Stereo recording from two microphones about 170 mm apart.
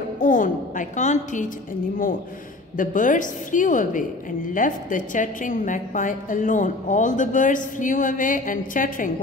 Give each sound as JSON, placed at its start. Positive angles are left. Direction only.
{"t": 0.2, "sound": "a woman's voice", "side_deg": 50}
{"t": 2.8, "sound": "a woman's voice", "side_deg": 50}